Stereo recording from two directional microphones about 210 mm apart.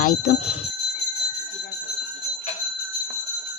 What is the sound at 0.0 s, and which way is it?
Speech, 35° left (ahead or behind).